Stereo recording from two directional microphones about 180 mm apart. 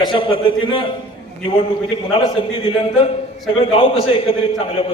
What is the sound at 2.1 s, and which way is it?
A man's voice, 30° left (ahead or behind).